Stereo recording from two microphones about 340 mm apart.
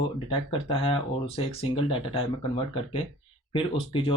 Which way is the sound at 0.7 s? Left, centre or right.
Centre.